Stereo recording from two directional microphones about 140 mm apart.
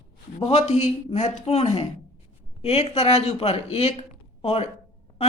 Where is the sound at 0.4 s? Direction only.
50° left (ahead or behind).